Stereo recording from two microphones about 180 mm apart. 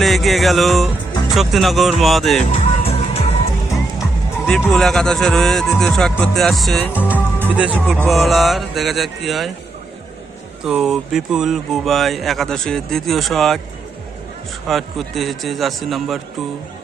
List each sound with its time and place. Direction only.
0.0 s music: centre (ahead or behind)
1.3 s speech: centre (ahead or behind)
2.5 s music: 35° left (ahead or behind)
4.4 s speech: 5° left (ahead or behind)
7.3 s music: 10° right (ahead or behind)
7.8 s speech: 5° left (ahead or behind)
10.7 s speech: centre (ahead or behind)
14.7 s speech: centre (ahead or behind)